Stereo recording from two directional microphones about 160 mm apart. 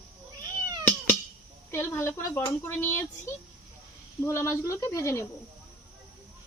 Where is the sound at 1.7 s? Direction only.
15° left (ahead or behind).